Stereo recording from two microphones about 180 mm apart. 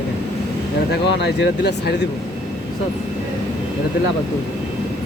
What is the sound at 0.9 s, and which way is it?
Speech, 65° left (ahead or behind).